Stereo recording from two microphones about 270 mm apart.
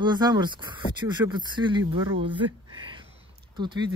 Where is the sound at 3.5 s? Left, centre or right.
Centre.